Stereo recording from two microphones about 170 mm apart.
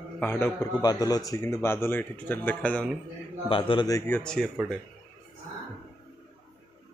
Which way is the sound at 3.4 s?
30° left (ahead or behind).